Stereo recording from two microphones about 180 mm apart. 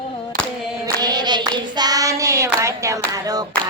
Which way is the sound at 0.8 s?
20° right (ahead or behind).